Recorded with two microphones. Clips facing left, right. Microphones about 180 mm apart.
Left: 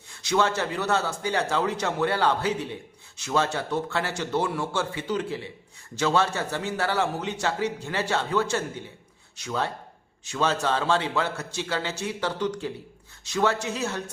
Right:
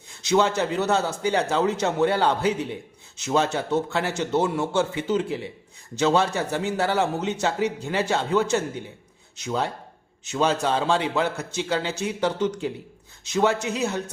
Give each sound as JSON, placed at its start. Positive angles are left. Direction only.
{"t": 0.1, "sound": "a man's voice", "side_deg": -20}